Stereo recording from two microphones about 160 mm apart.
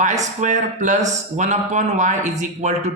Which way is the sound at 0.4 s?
50° right (ahead or behind).